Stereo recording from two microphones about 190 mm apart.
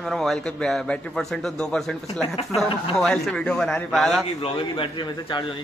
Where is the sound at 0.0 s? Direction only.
Centre (ahead or behind).